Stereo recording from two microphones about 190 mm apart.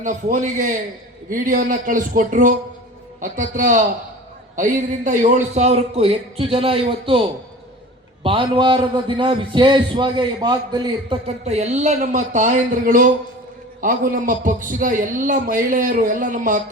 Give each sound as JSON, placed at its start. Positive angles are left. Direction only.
{"t": 0.0, "sound": "a man's voice", "side_deg": -40}
{"t": 11.4, "sound": "a man's voice", "side_deg": -35}